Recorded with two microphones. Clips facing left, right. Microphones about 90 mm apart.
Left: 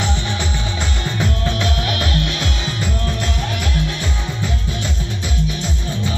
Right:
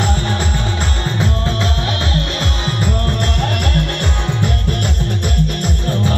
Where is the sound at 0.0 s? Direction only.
45° right (ahead or behind).